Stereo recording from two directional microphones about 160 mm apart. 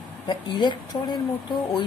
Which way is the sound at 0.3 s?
30° left (ahead or behind).